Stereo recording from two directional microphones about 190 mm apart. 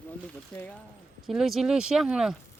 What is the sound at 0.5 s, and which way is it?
Speech, 10° left (ahead or behind).